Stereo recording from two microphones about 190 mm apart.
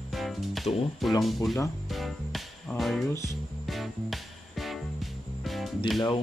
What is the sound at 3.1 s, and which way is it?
Speech, 15° left (ahead or behind).